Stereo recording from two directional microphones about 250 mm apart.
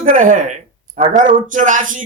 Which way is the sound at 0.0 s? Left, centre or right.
Right.